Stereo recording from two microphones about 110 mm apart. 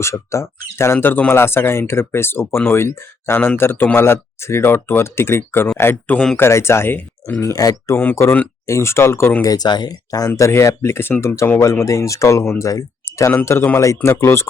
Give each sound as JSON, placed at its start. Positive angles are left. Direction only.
{"t": 0.0, "sound": "speech", "side_deg": 25}
{"t": 6.4, "sound": "speech", "side_deg": 25}
{"t": 7.4, "sound": "speech", "side_deg": 35}
{"t": 9.4, "sound": "speech", "side_deg": 35}